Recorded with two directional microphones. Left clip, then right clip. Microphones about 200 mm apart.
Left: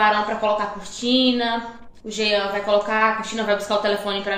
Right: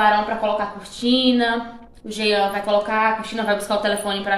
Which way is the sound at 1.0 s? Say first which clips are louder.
Right 1 dB; 5° right (ahead or behind).